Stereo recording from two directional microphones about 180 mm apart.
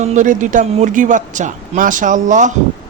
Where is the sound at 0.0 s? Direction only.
40° right (ahead or behind).